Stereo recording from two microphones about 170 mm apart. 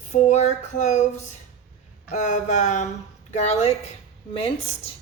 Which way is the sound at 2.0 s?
45° left (ahead or behind).